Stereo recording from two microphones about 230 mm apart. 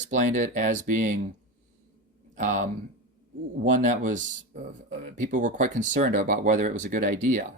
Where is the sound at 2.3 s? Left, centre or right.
Right.